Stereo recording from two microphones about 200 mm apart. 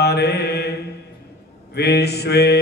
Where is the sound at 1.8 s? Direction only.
55° left (ahead or behind).